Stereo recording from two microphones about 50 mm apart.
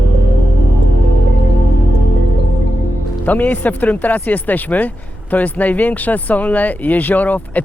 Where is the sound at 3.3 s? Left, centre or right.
Left.